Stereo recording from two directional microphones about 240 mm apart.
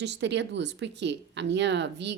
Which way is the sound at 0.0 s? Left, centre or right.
Right.